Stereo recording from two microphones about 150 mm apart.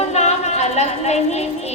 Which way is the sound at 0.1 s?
50° left (ahead or behind).